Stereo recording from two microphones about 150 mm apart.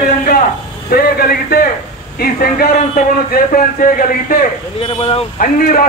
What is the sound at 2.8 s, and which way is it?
Speech, 50° left (ahead or behind).